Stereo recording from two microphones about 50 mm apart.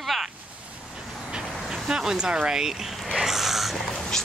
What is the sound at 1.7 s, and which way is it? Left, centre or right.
Speech, centre.